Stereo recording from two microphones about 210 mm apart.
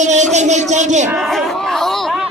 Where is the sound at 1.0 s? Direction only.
5° right (ahead or behind).